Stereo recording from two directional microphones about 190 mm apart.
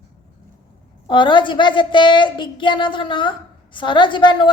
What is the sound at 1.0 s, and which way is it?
A woman's voice, 25° left (ahead or behind).